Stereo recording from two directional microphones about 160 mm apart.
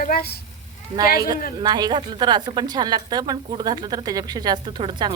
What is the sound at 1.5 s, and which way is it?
A woman's voice, 25° right (ahead or behind).